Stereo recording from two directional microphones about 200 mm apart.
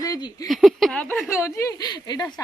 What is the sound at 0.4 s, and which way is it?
Speech, centre (ahead or behind).